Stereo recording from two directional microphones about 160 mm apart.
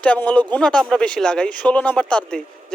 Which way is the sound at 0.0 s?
10° left (ahead or behind).